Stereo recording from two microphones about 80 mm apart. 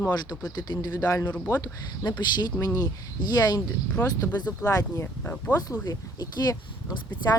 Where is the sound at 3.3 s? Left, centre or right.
Left.